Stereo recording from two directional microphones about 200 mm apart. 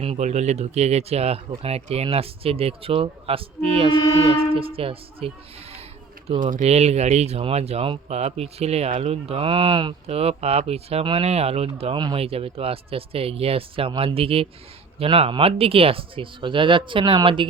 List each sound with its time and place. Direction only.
0.0 s speech: 30° right (ahead or behind)